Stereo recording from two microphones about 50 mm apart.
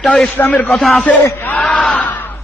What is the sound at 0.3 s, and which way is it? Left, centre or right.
Speech, left.